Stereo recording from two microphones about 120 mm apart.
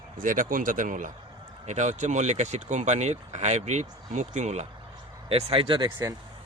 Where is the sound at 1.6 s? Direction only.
80° right.